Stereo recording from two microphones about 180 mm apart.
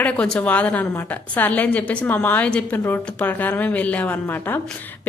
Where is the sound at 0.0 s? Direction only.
5° left (ahead or behind).